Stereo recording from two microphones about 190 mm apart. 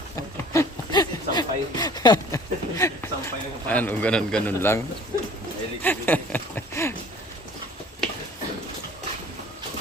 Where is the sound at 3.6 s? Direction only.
10° left (ahead or behind).